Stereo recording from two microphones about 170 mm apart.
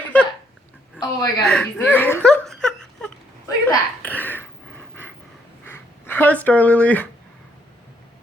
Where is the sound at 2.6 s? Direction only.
5° left (ahead or behind).